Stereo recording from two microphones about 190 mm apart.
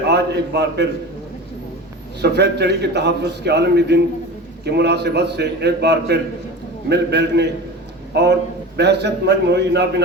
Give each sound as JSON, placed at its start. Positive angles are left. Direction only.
{"t": 0.1, "sound": "a man's voice", "side_deg": -60}
{"t": 2.2, "sound": "a man's voice", "side_deg": -60}